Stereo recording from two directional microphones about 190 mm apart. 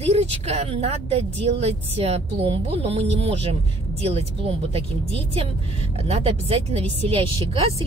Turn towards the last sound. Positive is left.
turn(degrees=-30)  # may be behind; listen again after turning